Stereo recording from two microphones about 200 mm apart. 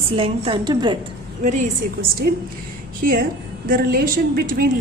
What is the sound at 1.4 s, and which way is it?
A woman's voice, 40° right (ahead or behind).